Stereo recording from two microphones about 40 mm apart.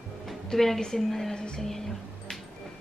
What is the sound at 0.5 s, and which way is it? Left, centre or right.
A woman's voice, centre.